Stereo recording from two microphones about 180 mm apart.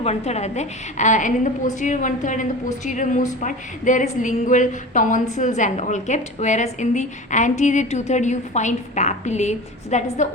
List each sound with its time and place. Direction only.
0.0 s a woman's voice: 35° left (ahead or behind)